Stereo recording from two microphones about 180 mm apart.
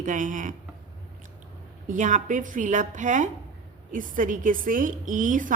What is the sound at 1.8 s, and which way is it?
A woman's voice, 45° right (ahead or behind).